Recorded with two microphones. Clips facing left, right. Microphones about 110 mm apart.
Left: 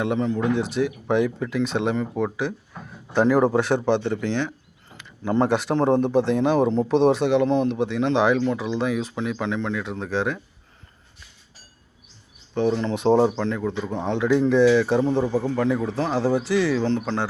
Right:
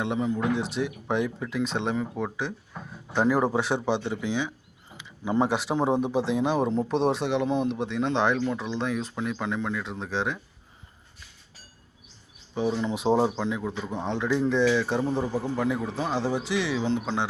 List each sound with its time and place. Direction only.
0.0 s speech: 5° right (ahead or behind)
12.5 s speech: 5° right (ahead or behind)